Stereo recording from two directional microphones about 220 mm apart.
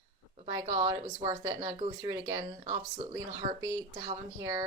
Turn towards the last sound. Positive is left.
turn(degrees=-20)  # may be behind; listen again after turning